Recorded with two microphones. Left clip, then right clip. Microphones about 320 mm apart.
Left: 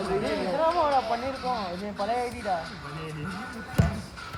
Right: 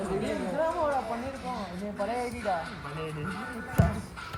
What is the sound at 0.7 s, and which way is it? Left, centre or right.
Speech, centre.